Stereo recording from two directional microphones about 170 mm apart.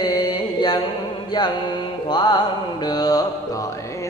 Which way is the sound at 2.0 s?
25° left (ahead or behind).